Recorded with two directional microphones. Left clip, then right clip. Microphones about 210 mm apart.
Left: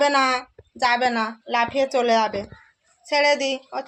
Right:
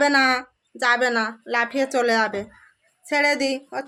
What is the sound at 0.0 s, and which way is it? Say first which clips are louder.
Speech: right 1 dB; 30° right (ahead or behind).